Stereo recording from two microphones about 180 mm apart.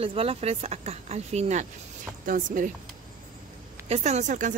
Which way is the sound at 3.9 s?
40° right (ahead or behind).